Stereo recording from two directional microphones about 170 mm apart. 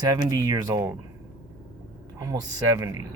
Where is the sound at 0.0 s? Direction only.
20° right (ahead or behind).